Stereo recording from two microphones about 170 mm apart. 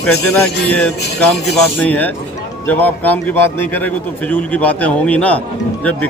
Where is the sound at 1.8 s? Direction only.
10° left (ahead or behind).